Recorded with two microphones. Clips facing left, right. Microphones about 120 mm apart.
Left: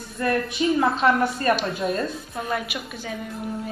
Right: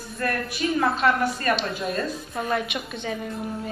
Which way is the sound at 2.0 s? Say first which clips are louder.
Even; centre (ahead or behind).